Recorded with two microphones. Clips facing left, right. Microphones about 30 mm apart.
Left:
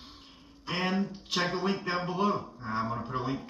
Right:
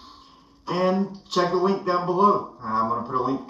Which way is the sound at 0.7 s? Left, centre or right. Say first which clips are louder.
Right 8 dB; left.